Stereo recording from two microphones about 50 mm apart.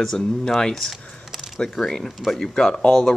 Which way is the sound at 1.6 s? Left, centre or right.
Centre.